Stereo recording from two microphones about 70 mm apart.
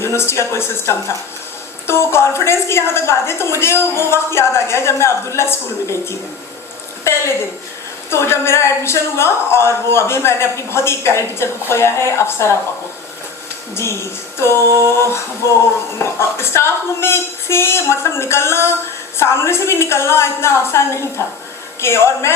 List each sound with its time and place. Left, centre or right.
0.0 s a woman's voice: left
8.1 s a woman's voice: left
13.7 s a woman's voice: left
16.1 s a woman's voice: left